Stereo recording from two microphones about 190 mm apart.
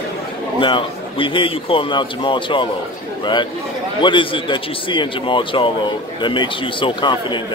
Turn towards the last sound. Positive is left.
turn(degrees=25)  # may be behind; listen again after turning